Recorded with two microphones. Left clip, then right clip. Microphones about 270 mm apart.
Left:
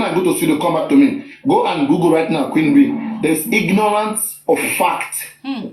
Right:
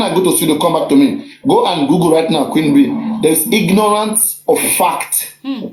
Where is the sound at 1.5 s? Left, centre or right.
Right.